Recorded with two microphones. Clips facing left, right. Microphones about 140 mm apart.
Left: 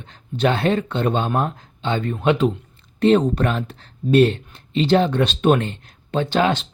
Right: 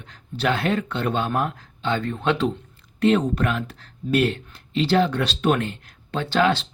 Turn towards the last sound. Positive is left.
turn(degrees=20)  # may be behind; listen again after turning